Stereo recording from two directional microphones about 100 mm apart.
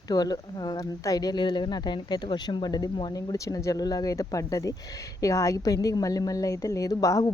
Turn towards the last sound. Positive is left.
turn(degrees=35)  # may be behind; listen again after turning